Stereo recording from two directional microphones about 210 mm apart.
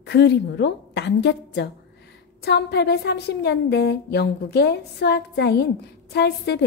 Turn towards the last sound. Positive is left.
turn(degrees=50)  # may be behind; listen again after turning